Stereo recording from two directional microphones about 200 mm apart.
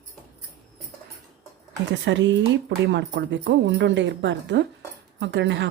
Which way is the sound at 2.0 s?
65° right (ahead or behind).